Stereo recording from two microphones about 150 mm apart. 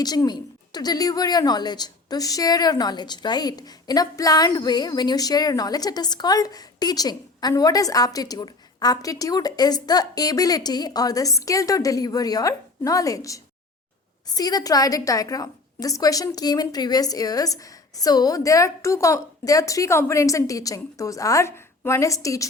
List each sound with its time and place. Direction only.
0.0 s a woman's voice: 25° left (ahead or behind)